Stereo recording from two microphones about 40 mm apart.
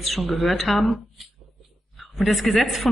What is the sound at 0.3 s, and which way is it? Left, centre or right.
A woman's voice, centre.